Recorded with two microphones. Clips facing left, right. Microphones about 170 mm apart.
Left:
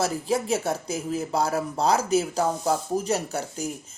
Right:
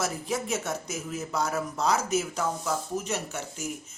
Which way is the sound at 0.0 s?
30° left (ahead or behind).